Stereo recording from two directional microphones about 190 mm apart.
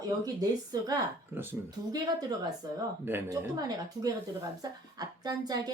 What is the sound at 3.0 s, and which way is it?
A woman's voice, 10° right (ahead or behind).